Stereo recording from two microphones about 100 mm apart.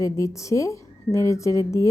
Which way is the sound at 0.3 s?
30° left (ahead or behind).